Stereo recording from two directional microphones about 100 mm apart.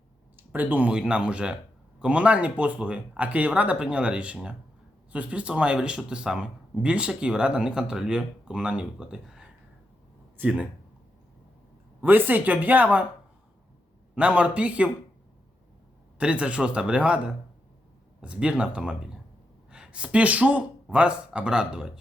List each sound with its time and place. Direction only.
0.5 s speech: 15° right (ahead or behind)
10.3 s speech: 15° right (ahead or behind)
11.9 s speech: 20° right (ahead or behind)
14.2 s speech: 15° right (ahead or behind)
16.1 s speech: 10° right (ahead or behind)